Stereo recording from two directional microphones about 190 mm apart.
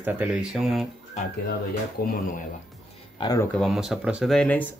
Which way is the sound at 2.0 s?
50° left (ahead or behind).